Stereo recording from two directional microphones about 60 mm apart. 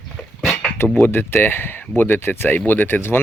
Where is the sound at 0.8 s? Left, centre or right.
Left.